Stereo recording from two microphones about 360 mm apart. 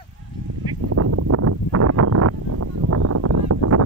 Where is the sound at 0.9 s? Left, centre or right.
Right.